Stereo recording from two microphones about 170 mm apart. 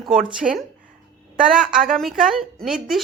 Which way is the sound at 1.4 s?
5° right (ahead or behind).